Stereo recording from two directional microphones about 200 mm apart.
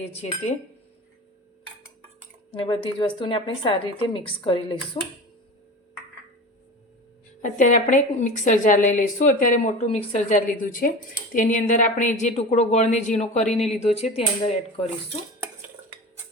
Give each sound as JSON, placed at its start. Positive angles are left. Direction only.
{"t": 0.0, "sound": "a woman's voice", "side_deg": 30}
{"t": 2.5, "sound": "a woman's voice", "side_deg": 25}
{"t": 7.4, "sound": "a woman's voice", "side_deg": 40}